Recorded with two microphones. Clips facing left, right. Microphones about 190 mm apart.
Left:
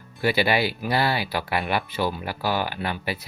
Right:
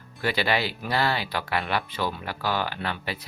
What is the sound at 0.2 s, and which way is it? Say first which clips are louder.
Speech: left 4 dB; 10° left (ahead or behind).